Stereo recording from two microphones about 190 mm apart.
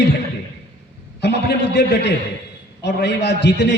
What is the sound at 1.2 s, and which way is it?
A man's voice, 60° left (ahead or behind).